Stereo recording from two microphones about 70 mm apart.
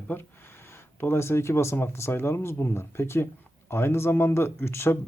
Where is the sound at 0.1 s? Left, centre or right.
Left.